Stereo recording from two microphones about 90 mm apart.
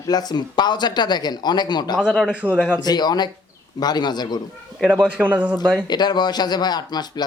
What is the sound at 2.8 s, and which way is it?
Speech, 50° left (ahead or behind).